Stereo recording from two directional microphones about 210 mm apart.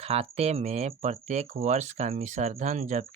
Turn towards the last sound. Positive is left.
turn(degrees=-35)  # may be behind; listen again after turning